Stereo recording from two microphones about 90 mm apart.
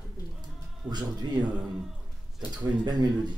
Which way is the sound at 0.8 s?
50° right (ahead or behind).